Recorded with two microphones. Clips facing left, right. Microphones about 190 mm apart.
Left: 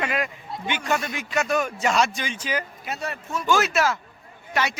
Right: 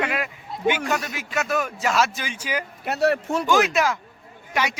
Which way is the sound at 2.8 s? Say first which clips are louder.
Right 10 dB; 65° right (ahead or behind).